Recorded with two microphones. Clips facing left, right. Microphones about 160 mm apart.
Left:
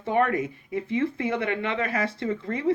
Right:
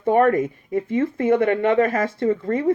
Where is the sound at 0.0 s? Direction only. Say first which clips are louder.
Right 7 dB; 45° right (ahead or behind).